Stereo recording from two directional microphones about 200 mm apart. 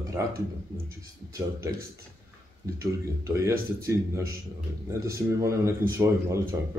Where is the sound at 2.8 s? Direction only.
15° right (ahead or behind).